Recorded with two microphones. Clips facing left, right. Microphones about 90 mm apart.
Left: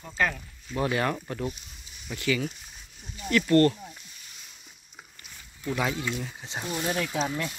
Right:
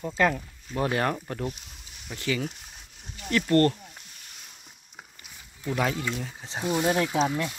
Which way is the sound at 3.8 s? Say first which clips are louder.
Left 3 dB; 60° right (ahead or behind).